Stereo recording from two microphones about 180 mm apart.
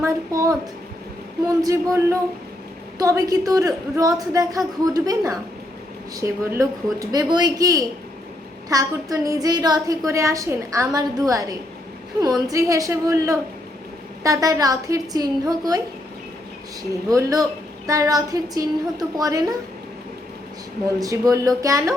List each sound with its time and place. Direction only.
0.0 s a woman's voice: 20° right (ahead or behind)
1.6 s a woman's voice: 15° right (ahead or behind)
17.1 s a woman's voice: 20° right (ahead or behind)
21.0 s a woman's voice: 20° right (ahead or behind)